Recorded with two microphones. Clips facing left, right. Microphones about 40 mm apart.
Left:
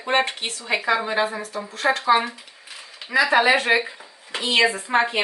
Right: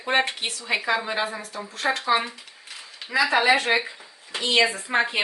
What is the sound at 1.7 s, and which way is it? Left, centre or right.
A woman's voice, centre.